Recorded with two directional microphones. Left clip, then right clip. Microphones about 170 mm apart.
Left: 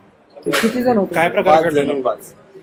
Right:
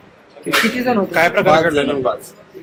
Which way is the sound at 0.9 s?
20° left (ahead or behind).